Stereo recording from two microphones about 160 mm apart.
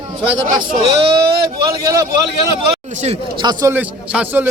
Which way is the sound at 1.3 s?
80° right.